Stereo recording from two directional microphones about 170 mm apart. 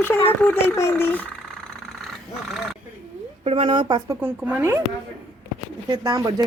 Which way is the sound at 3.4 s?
30° right (ahead or behind).